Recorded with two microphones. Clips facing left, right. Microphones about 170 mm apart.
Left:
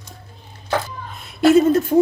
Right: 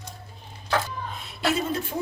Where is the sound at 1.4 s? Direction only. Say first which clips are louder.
Left 13 dB; 50° left (ahead or behind).